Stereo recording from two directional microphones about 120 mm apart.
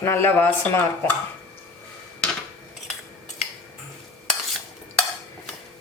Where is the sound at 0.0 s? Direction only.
20° left (ahead or behind).